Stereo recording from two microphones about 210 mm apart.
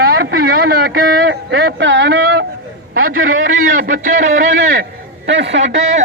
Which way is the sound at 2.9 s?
75° right (ahead or behind).